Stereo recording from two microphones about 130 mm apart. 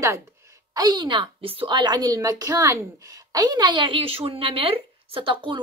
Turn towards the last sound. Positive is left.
turn(degrees=-40)  # may be behind; listen again after turning